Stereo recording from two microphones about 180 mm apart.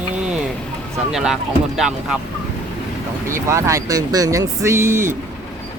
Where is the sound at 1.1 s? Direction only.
Centre (ahead or behind).